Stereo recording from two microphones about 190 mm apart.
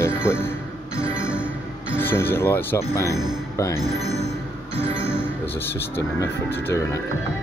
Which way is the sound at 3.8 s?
Centre (ahead or behind).